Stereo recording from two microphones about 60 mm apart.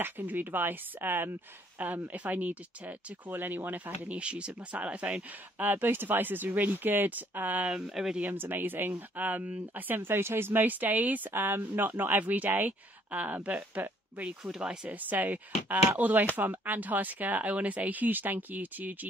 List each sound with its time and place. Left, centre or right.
0.0 s speech: right
5.6 s speech: right
7.7 s speech: centre
8.2 s speech: right
14.4 s speech: centre
14.9 s speech: right